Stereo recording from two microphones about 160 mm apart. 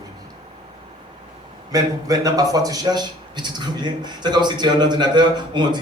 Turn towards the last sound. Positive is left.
turn(degrees=-25)  # may be behind; listen again after turning